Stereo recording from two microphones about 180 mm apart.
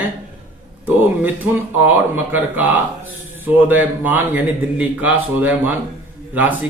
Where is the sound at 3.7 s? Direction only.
10° right (ahead or behind).